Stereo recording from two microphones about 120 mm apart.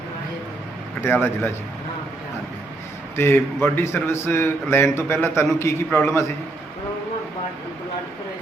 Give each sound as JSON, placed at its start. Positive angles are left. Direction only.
{"t": 1.0, "sound": "a man's voice", "side_deg": 20}
{"t": 3.2, "sound": "a man's voice", "side_deg": 20}